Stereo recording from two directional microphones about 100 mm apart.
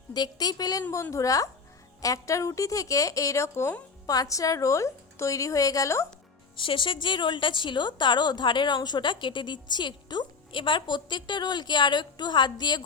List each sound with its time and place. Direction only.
0.1 s a woman's voice: 45° left (ahead or behind); by 3.8 s 25° left (ahead or behind)
4.0 s a woman's voice: 40° left (ahead or behind)
6.6 s a woman's voice: 55° left (ahead or behind)